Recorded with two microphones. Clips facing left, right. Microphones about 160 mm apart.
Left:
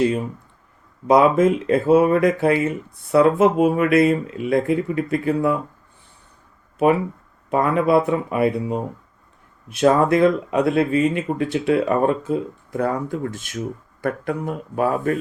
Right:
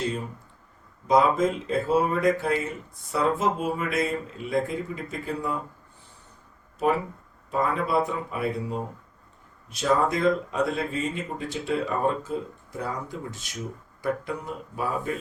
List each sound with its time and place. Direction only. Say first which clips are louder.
1.0 s speech: left 6 dB; 65° left (ahead or behind)
7.5 s speech: left 8 dB; 70° left (ahead or behind)